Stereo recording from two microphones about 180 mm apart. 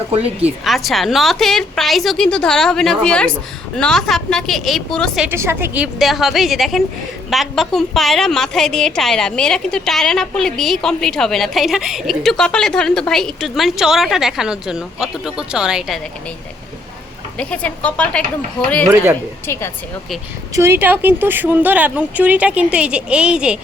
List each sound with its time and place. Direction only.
0.1 s speech: 35° right (ahead or behind)
0.6 s a woman's voice: centre (ahead or behind)
5.3 s a woman's voice: 15° right (ahead or behind)
17.3 s speech: 5° left (ahead or behind)
19.5 s speech: 15° left (ahead or behind)
20.5 s speech: 15° right (ahead or behind)